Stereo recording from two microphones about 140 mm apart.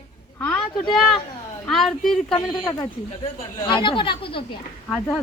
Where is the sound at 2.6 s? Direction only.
25° left (ahead or behind).